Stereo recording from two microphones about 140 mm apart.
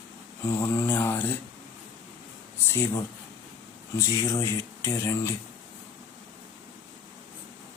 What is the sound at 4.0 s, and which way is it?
Speech, 20° left (ahead or behind).